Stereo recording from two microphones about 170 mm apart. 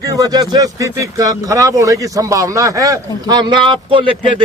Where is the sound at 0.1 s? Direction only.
20° right (ahead or behind).